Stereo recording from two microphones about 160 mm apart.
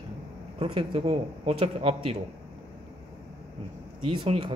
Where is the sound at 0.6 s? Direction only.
35° right (ahead or behind).